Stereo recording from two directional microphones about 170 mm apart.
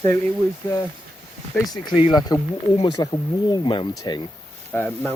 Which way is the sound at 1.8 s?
30° left (ahead or behind).